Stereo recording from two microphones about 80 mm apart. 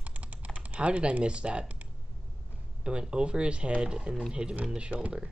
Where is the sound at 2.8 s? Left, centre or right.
Centre.